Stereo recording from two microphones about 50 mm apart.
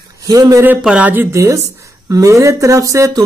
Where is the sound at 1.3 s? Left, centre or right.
Right.